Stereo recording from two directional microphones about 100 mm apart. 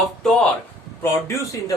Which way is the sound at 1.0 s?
30° left (ahead or behind).